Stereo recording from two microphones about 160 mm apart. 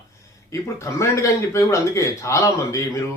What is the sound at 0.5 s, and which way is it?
A man's voice, 20° left (ahead or behind).